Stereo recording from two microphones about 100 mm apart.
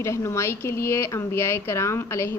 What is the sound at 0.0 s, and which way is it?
Speech, 30° left (ahead or behind).